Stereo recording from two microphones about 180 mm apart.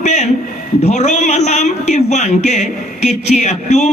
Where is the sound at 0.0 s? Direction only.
40° left (ahead or behind).